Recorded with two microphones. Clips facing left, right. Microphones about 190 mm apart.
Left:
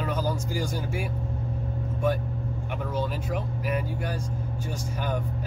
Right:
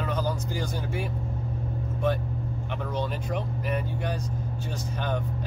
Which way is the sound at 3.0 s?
5° left (ahead or behind).